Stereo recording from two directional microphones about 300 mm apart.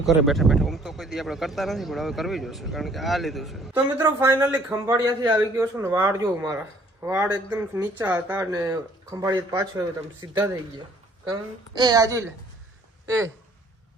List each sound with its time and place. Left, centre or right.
0.0 s a woman's voice: centre